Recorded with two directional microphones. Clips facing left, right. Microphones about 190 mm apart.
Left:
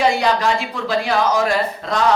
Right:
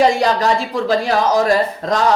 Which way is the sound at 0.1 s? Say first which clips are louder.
Right 2 dB; 40° right (ahead or behind).